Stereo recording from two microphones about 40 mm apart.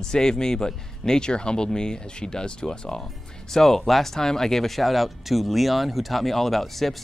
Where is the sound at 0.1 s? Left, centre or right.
Centre.